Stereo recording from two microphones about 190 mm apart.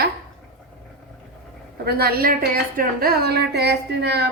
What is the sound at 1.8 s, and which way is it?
A woman's voice, 55° right (ahead or behind).